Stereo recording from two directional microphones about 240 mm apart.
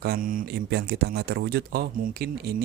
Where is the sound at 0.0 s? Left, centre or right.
Right.